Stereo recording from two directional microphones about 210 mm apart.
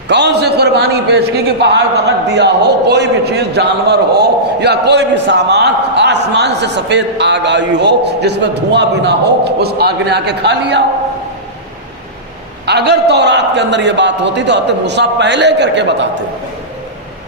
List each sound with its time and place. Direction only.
0.1 s a man's voice: 55° right (ahead or behind)
12.6 s a man's voice: 55° right (ahead or behind)